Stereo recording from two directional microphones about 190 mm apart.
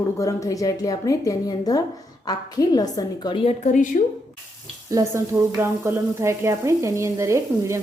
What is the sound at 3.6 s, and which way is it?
Speech, 40° left (ahead or behind).